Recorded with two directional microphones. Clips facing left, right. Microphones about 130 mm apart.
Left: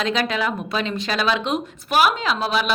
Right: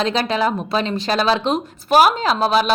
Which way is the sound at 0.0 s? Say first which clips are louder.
Right 3 dB; 35° right (ahead or behind).